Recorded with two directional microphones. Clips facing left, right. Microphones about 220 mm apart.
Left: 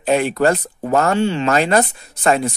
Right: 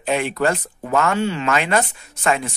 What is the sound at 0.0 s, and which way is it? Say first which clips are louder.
Speech: left 4 dB; 35° left (ahead or behind).